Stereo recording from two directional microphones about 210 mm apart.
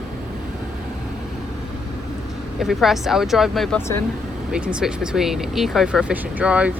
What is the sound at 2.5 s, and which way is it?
Speech, centre (ahead or behind).